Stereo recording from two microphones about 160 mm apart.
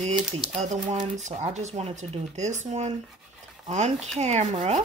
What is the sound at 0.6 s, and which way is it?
Speech, 45° right (ahead or behind).